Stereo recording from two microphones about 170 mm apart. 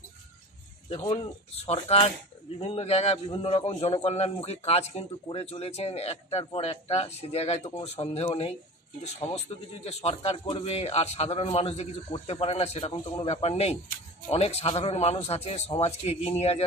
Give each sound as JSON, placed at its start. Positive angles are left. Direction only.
{"t": 0.8, "sound": "a man's voice", "side_deg": 35}